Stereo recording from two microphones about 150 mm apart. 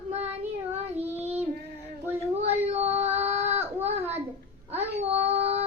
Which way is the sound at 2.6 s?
45° right (ahead or behind).